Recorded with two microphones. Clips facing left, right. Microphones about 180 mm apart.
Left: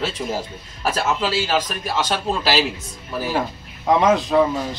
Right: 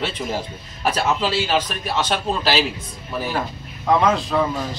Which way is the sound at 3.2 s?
10° left (ahead or behind).